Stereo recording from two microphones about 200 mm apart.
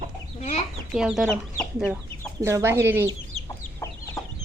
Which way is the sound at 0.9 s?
Centre (ahead or behind).